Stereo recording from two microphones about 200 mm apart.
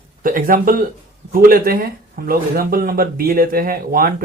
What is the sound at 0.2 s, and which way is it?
A man's voice, 45° right (ahead or behind).